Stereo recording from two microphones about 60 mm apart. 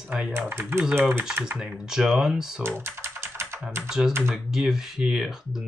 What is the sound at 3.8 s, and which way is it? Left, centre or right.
Speech, centre.